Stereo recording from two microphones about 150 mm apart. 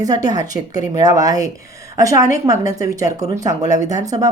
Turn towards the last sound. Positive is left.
turn(degrees=-25)  # may be behind; listen again after turning